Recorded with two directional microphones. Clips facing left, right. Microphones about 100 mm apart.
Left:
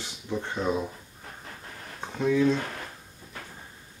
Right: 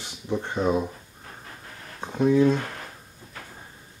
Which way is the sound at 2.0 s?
15° right (ahead or behind).